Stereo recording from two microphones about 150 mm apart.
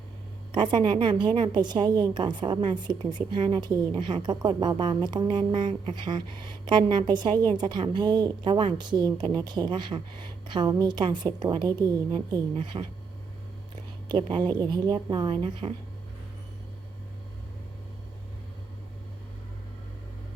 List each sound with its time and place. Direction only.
0.5 s a woman's voice: 30° right (ahead or behind)
14.1 s a woman's voice: 30° right (ahead or behind)